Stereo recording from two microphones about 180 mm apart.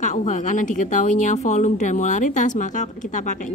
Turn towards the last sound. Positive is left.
turn(degrees=45)  # may be behind; listen again after turning